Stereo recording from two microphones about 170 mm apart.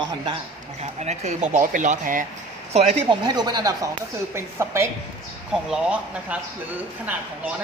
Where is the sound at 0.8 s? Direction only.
40° right (ahead or behind).